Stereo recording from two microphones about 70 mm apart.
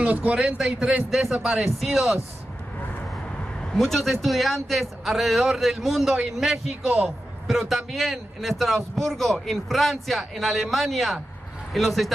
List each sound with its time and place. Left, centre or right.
0.0 s a man's voice: centre
0.6 s a man's voice: centre
3.7 s a man's voice: centre